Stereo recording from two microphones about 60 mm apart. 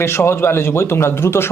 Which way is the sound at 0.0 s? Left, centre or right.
Left.